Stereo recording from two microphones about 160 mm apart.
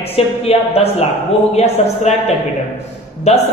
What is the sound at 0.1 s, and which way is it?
A man's voice, 40° left (ahead or behind).